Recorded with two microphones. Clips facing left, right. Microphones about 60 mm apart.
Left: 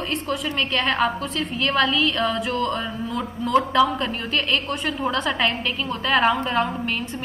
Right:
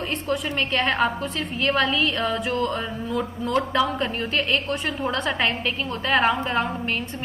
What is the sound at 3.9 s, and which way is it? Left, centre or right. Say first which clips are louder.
A woman's voice: even; centre.